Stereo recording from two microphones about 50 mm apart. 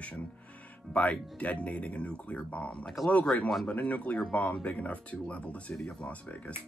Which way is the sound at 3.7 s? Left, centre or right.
Left.